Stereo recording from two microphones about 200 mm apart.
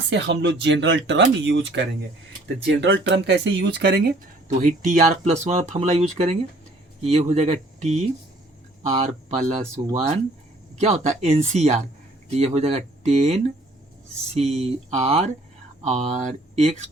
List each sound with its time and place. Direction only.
0.1 s speech: 60° right (ahead or behind)
4.6 s speech: 40° right (ahead or behind)